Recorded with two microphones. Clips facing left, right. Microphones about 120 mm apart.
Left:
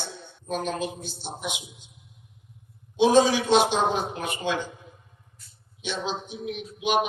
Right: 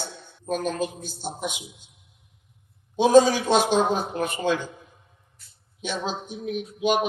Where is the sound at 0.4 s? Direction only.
45° right (ahead or behind).